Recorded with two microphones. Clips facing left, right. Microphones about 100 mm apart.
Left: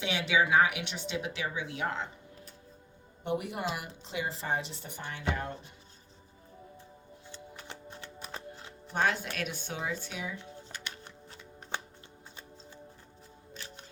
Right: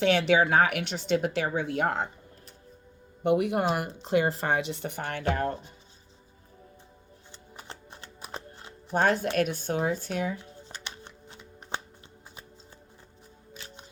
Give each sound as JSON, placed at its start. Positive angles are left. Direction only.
{"t": 0.0, "sound": "speech", "side_deg": -55}
{"t": 3.2, "sound": "speech", "side_deg": -65}
{"t": 8.9, "sound": "speech", "side_deg": -45}
{"t": 10.7, "sound": "shuffling cards", "side_deg": -20}